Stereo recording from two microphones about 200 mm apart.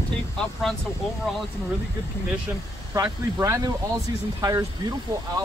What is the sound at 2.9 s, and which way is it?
Speech, 15° right (ahead or behind).